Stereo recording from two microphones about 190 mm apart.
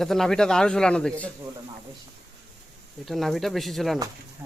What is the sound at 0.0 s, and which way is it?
Speech, centre (ahead or behind).